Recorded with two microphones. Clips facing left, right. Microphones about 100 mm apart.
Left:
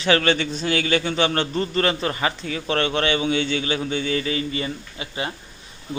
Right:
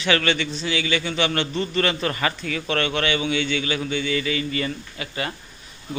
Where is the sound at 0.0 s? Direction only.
35° left (ahead or behind).